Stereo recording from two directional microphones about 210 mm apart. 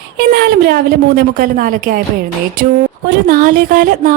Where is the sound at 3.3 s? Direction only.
40° right (ahead or behind).